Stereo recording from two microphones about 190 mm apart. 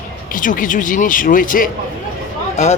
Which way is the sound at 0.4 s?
45° left (ahead or behind).